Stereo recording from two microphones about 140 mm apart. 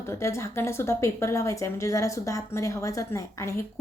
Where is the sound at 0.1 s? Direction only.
20° left (ahead or behind).